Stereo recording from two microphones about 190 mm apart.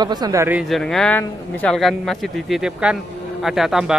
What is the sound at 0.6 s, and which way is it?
Speech, centre (ahead or behind).